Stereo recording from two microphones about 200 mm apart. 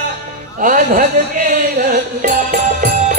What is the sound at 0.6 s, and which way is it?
Music, 40° right (ahead or behind).